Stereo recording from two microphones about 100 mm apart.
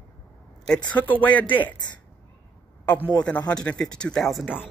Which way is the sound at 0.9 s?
15° left (ahead or behind).